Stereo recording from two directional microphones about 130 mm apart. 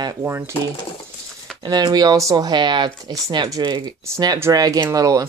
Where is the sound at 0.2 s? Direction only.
20° right (ahead or behind).